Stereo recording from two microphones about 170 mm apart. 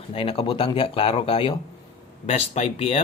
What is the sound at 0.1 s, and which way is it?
Speech, 35° left (ahead or behind).